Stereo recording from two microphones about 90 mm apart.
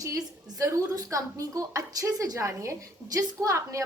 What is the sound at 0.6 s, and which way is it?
A woman's voice, 40° right (ahead or behind).